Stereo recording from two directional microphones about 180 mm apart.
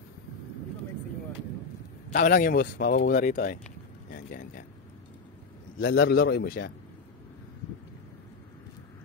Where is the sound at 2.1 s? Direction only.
50° left (ahead or behind).